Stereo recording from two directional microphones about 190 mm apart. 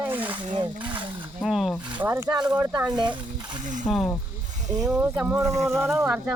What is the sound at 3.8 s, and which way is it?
Speech, centre (ahead or behind).